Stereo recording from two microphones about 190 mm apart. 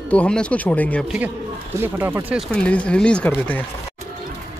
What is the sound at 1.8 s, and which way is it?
Speech, 10° right (ahead or behind).